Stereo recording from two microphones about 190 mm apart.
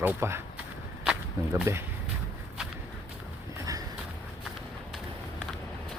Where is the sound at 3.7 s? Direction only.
20° right (ahead or behind).